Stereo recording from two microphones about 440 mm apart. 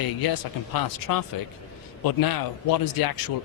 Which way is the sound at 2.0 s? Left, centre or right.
Left.